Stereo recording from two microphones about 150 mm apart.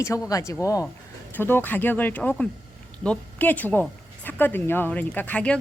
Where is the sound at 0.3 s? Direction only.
20° left (ahead or behind).